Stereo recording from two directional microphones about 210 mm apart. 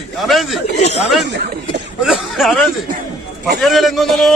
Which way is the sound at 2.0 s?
Centre (ahead or behind).